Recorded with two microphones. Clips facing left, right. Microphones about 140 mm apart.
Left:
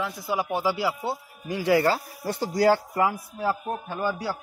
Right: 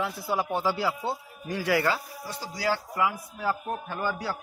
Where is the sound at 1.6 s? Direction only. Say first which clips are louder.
Left 5 dB; 25° left (ahead or behind).